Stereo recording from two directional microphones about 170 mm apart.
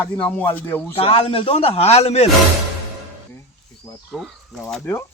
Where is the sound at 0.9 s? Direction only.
35° left (ahead or behind).